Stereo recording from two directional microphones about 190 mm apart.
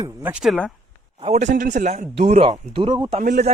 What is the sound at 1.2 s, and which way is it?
A man's voice, 35° right (ahead or behind).